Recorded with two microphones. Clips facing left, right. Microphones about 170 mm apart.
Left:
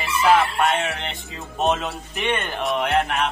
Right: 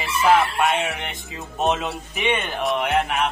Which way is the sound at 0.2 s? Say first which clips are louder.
Even; 5° right (ahead or behind).